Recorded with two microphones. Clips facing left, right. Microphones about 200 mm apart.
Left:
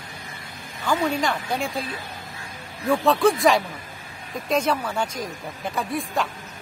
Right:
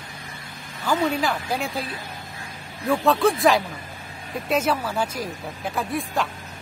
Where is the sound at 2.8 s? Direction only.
Centre (ahead or behind).